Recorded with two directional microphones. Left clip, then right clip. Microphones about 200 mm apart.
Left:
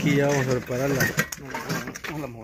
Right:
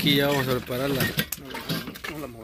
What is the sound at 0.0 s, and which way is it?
Speech, 10° right (ahead or behind).